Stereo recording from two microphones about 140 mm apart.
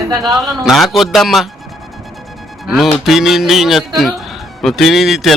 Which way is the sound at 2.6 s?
5° right (ahead or behind).